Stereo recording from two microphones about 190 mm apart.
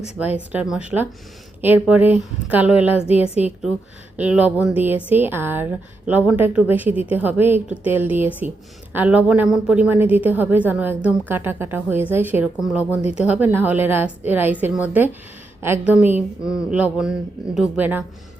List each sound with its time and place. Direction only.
0.3 s a woman's voice: 5° right (ahead or behind)
3.1 s a woman's voice: 30° left (ahead or behind)
4.2 s a woman's voice: 5° right (ahead or behind)
13.0 s a woman's voice: 35° left (ahead or behind)
13.2 s a woman's voice: 10° right (ahead or behind)